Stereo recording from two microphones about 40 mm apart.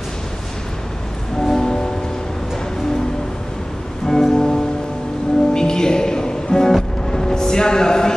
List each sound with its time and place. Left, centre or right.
1.4 s music: centre
4.1 s music: centre